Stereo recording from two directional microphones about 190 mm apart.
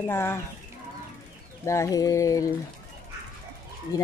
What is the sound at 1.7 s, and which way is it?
Speech, 15° left (ahead or behind).